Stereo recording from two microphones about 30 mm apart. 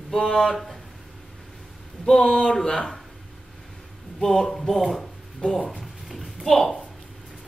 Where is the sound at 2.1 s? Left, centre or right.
Left.